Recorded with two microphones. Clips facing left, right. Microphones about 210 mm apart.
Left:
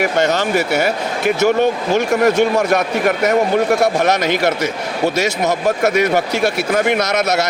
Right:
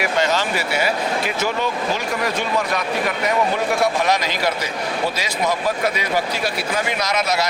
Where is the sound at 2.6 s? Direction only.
45° left (ahead or behind).